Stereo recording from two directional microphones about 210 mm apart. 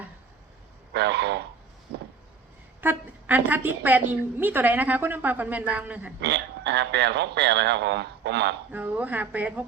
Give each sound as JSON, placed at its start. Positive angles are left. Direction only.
{"t": 0.9, "sound": "speech", "side_deg": -50}
{"t": 2.8, "sound": "a woman's voice", "side_deg": -10}
{"t": 6.2, "sound": "speech", "side_deg": -50}
{"t": 8.7, "sound": "a woman's voice", "side_deg": -10}